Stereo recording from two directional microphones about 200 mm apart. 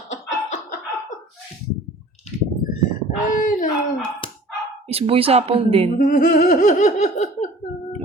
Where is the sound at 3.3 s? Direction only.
40° left (ahead or behind).